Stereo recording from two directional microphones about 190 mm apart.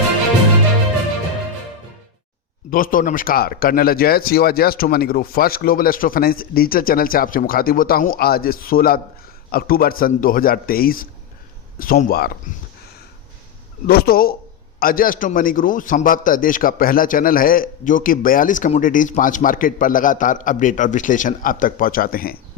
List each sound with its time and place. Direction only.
2.6 s a man's voice: 45° left (ahead or behind)
13.8 s a man's voice: 55° left (ahead or behind)